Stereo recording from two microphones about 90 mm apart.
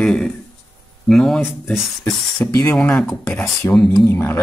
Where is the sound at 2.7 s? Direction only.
15° left (ahead or behind).